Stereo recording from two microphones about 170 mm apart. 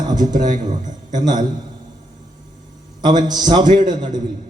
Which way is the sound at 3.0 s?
25° right (ahead or behind).